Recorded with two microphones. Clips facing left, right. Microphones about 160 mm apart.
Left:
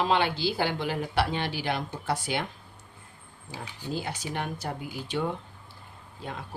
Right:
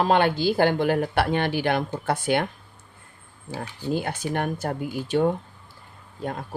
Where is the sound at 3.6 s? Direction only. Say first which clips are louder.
Right 7 dB; 55° right (ahead or behind).